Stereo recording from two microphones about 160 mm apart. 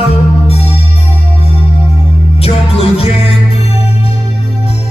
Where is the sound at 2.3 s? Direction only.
40° left (ahead or behind).